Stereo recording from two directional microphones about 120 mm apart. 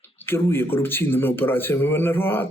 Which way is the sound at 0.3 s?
20° left (ahead or behind).